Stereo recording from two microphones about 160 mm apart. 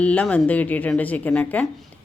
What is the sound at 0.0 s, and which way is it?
A woman's voice, 10° left (ahead or behind).